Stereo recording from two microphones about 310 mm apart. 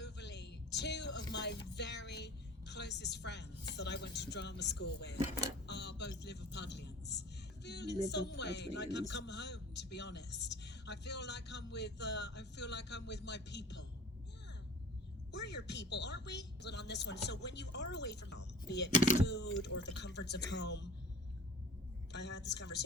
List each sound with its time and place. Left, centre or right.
0.0 s a sound: left
1.3 s music: left
1.7 s a woman's voice: left
15.3 s speech: left
22.1 s speech: left